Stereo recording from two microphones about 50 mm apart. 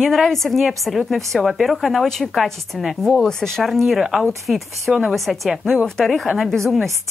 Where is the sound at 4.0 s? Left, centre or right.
Centre.